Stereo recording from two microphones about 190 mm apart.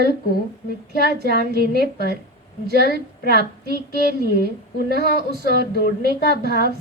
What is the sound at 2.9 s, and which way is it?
Speech, 55° right (ahead or behind).